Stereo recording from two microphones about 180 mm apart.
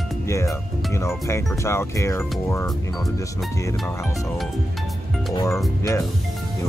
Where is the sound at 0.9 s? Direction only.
15° left (ahead or behind).